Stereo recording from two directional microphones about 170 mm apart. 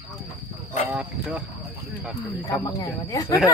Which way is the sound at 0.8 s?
10° right (ahead or behind).